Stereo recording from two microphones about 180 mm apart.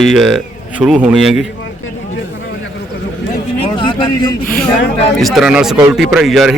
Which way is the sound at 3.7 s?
25° left (ahead or behind).